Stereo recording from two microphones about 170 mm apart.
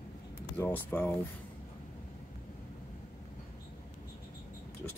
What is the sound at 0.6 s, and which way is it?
Speech, 10° left (ahead or behind).